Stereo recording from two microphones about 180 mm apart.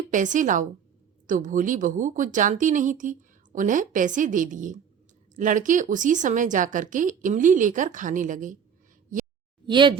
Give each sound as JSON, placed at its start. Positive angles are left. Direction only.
{"t": 0.1, "sound": "a woman's voice", "side_deg": -45}
{"t": 9.6, "sound": "speech", "side_deg": -25}